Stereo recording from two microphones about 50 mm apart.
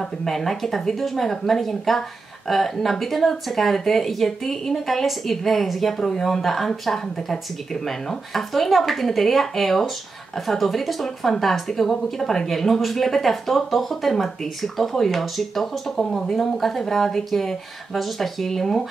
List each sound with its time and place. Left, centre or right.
0.0 s speech: centre